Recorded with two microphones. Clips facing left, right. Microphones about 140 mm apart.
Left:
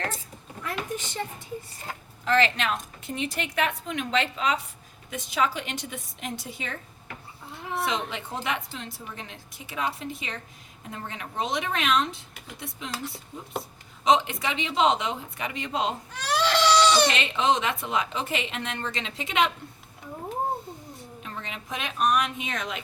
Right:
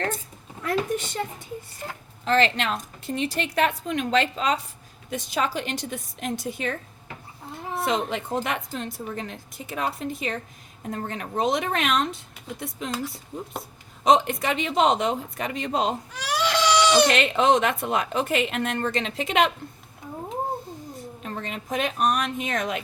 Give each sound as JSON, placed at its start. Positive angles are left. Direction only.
{"t": 0.6, "sound": "speech", "side_deg": -70}
{"t": 2.2, "sound": "a woman's voice", "side_deg": -30}
{"t": 7.9, "sound": "a woman's voice", "side_deg": -50}
{"t": 14.0, "sound": "a woman's voice", "side_deg": -45}
{"t": 16.1, "sound": "baby cry", "side_deg": -15}
{"t": 17.1, "sound": "a woman's voice", "side_deg": -50}
{"t": 21.2, "sound": "a woman's voice", "side_deg": -45}